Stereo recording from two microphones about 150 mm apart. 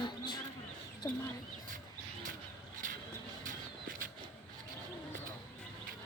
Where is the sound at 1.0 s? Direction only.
15° left (ahead or behind).